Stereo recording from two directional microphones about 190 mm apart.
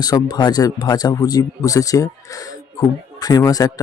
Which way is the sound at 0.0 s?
20° left (ahead or behind).